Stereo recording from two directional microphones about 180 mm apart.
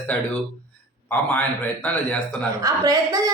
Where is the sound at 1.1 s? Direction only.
10° left (ahead or behind).